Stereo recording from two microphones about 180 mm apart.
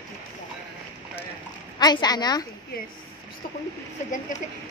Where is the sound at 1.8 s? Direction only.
20° left (ahead or behind).